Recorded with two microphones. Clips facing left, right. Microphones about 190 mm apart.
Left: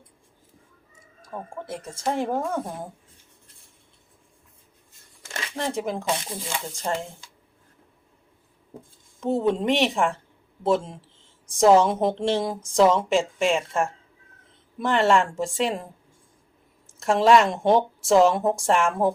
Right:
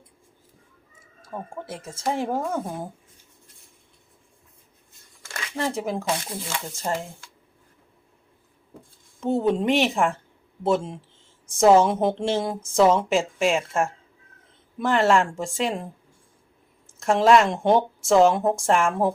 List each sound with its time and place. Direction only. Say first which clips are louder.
1.2 s a woman's voice: right 1 dB; 5° right (ahead or behind)
5.5 s a woman's voice: right 1 dB; 5° right (ahead or behind)
6.9 s speech: even; 15° right (ahead or behind)
9.2 s a woman's voice: right 1 dB; centre (ahead or behind)